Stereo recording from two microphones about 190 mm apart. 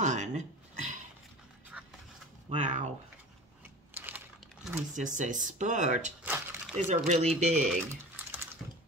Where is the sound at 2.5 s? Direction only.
40° right (ahead or behind).